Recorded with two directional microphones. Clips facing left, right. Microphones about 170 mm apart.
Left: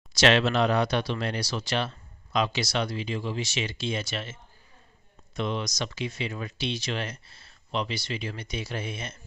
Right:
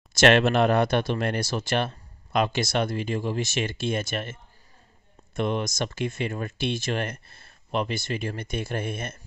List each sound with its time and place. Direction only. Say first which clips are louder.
0.1 s speech: right 3 dB; 50° right (ahead or behind)